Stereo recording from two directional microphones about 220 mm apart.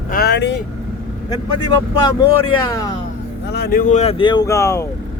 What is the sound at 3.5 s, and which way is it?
A man's voice, 45° left (ahead or behind).